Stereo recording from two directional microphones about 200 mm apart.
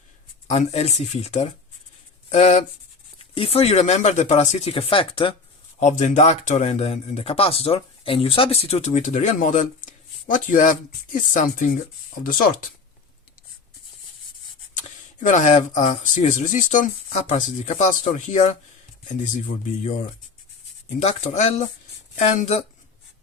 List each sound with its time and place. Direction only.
0.5 s speech: 35° left (ahead or behind)
5.8 s speech: 40° left (ahead or behind)
14.8 s speech: 35° left (ahead or behind)
21.0 s speech: 35° left (ahead or behind)